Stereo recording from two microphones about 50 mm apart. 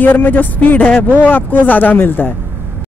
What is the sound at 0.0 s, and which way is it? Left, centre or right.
Speech, left.